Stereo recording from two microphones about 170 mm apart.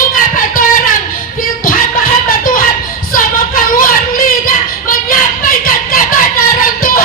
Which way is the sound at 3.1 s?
55° left (ahead or behind).